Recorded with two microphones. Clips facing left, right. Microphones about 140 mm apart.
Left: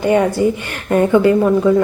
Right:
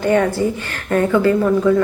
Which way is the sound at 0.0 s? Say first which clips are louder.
Left 2 dB; 10° left (ahead or behind).